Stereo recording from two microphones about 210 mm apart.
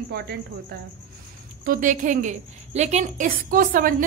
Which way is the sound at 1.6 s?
40° right (ahead or behind).